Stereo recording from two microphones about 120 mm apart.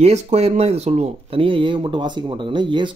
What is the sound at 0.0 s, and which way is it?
Speech, 65° right (ahead or behind).